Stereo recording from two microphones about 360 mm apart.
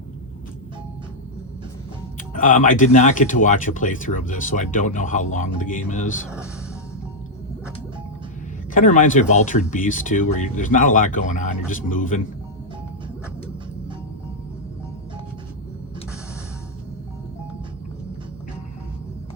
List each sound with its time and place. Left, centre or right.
2.1 s speech: left
8.7 s speech: left